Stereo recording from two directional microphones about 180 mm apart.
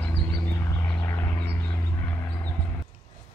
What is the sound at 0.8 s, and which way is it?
Vehicle, 15° left (ahead or behind).